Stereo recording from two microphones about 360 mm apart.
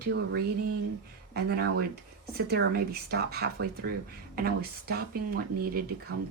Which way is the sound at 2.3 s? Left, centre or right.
Right.